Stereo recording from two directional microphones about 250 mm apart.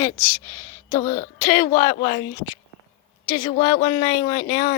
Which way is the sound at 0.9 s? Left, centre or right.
Centre.